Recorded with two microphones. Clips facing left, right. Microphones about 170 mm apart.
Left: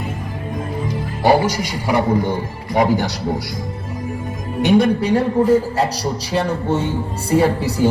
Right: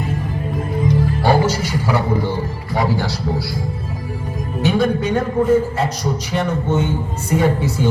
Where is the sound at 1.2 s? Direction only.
15° left (ahead or behind).